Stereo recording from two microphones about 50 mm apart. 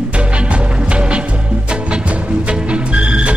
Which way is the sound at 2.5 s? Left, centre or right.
Right.